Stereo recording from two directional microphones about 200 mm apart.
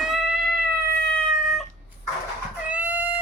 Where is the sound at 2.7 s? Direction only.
10° right (ahead or behind).